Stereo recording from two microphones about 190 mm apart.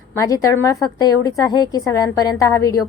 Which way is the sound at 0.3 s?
15° left (ahead or behind).